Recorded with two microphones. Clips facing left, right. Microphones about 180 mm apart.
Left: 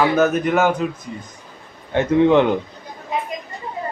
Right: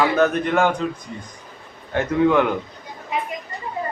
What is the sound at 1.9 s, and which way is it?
Speech, 25° left (ahead or behind).